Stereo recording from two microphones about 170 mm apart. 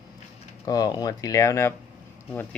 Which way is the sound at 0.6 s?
20° left (ahead or behind).